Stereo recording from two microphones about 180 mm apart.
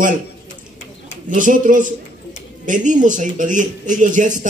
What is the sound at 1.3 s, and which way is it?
Speech, 45° right (ahead or behind).